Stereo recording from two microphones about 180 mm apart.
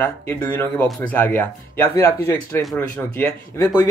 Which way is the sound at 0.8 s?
Centre (ahead or behind).